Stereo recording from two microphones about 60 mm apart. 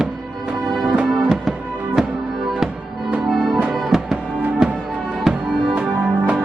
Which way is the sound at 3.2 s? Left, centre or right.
Centre.